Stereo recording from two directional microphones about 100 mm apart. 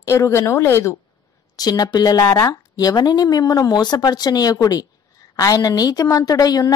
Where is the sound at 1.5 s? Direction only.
40° left (ahead or behind).